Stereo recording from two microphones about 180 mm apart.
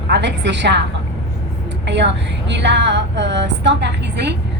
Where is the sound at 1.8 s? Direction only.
75° right (ahead or behind).